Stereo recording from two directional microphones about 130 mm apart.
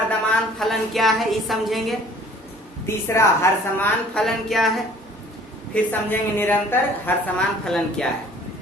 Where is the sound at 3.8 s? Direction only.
5° left (ahead or behind).